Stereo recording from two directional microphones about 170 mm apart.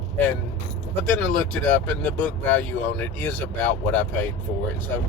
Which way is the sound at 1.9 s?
10° left (ahead or behind).